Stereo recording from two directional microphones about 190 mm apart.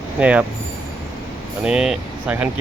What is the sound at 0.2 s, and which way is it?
Speech, 5° right (ahead or behind).